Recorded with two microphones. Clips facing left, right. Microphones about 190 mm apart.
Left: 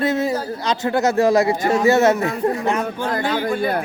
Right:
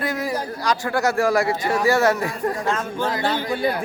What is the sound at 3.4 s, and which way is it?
Speech, 55° left (ahead or behind).